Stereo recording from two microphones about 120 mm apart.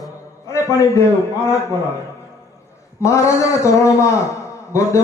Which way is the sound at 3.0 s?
25° left (ahead or behind).